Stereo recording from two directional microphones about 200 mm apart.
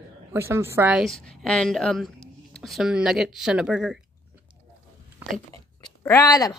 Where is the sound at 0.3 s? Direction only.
10° right (ahead or behind).